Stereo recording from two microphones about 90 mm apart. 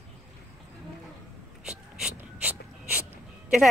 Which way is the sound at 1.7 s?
10° right (ahead or behind).